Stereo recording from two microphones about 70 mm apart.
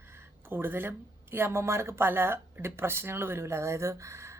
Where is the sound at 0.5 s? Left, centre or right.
Right.